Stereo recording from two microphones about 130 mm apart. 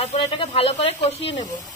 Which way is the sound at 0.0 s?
55° left (ahead or behind).